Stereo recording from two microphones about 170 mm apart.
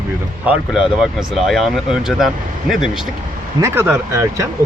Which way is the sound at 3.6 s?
15° right (ahead or behind).